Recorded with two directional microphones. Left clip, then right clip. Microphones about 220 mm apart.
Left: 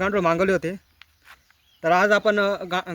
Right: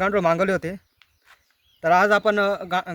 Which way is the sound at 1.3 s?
35° left (ahead or behind).